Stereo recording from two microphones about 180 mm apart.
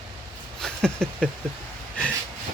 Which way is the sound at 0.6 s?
5° left (ahead or behind).